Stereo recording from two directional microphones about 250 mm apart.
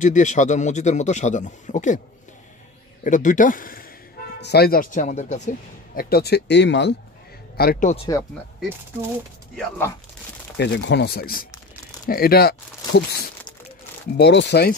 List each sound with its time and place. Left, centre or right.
0.0 s a man's voice: left
3.0 s speech: left
7.9 s a man's voice: left
9.6 s speech: centre
10.6 s speech: left
14.1 s speech: left